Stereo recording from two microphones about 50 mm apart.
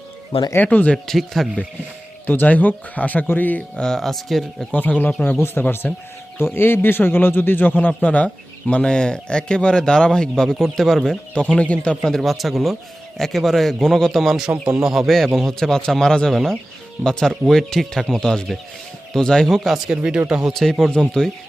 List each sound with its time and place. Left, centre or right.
0.6 s speech: left
1.0 s a man's voice: centre
2.2 s speech: left
3.8 s a man's voice: centre
4.7 s speech: left
6.4 s a man's voice: left
8.0 s speech: left; by 11.2 s centre
11.3 s speech: centre
12.0 s a man's voice: centre
16.3 s a man's voice: centre
17.0 s speech: centre
20.1 s speech: centre
20.5 s a man's voice: centre